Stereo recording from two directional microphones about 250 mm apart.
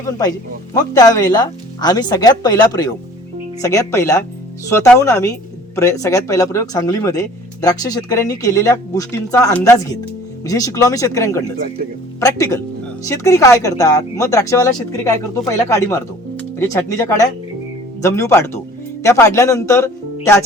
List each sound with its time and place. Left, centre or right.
0.0 s speech: centre